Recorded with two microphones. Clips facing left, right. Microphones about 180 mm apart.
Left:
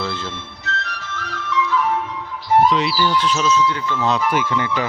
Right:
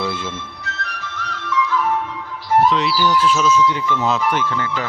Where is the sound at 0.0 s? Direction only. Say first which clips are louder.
Right 2 dB; 15° right (ahead or behind).